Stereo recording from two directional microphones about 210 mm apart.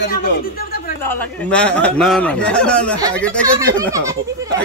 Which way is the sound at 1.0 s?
10° left (ahead or behind).